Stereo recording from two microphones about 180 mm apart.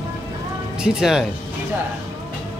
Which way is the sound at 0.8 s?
5° right (ahead or behind).